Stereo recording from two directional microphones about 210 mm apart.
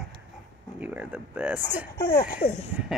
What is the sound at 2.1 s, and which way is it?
Speech, 45° left (ahead or behind).